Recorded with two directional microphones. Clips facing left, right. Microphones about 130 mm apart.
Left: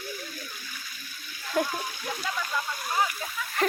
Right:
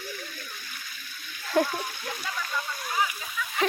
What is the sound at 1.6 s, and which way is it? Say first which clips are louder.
Speech: right 3 dB; 30° right (ahead or behind).